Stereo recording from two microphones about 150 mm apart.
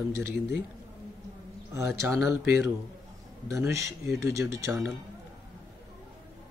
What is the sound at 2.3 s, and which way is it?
Speech, 20° right (ahead or behind).